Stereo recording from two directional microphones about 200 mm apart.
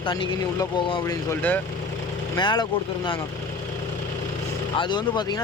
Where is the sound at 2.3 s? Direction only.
20° left (ahead or behind).